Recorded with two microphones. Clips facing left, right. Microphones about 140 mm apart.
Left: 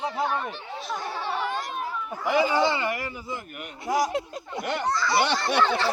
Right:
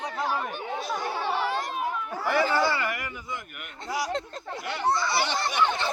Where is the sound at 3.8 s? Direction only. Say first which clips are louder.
Left 5 dB; 45° left (ahead or behind).